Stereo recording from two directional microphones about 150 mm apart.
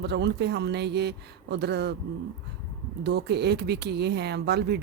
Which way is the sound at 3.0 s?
90° right.